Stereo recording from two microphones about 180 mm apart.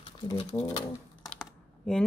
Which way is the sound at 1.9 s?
5° left (ahead or behind).